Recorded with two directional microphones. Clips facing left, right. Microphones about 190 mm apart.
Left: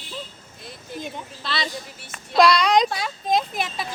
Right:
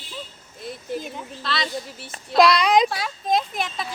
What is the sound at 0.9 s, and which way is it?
Speech, centre (ahead or behind).